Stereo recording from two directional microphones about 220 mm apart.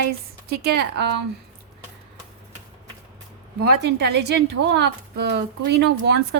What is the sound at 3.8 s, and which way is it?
A woman's voice, 50° right (ahead or behind).